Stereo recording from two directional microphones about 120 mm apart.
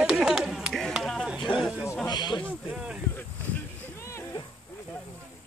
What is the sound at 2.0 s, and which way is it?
Snake, 35° left (ahead or behind).